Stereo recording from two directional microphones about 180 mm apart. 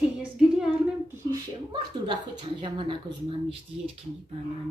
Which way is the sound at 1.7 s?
25° right (ahead or behind).